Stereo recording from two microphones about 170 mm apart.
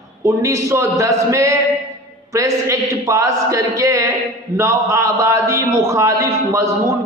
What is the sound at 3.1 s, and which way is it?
A man's voice, 20° right (ahead or behind).